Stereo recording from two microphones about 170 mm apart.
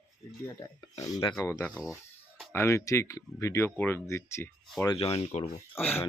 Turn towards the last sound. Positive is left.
turn(degrees=10)  # may be behind; listen again after turning